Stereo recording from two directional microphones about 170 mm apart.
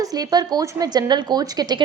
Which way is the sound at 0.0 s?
20° right (ahead or behind).